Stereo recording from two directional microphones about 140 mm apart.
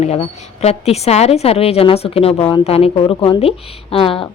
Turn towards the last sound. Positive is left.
turn(degrees=40)  # may be behind; listen again after turning